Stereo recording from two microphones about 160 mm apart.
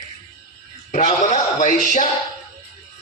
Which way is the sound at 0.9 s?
50° left (ahead or behind).